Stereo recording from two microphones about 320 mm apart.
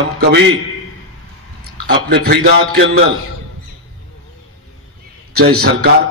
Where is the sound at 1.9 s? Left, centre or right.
Right.